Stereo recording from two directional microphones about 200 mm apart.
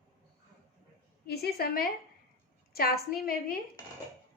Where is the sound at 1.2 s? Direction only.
50° left (ahead or behind).